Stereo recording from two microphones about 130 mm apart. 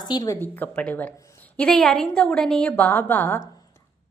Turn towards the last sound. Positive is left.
turn(degrees=15)  # may be behind; listen again after turning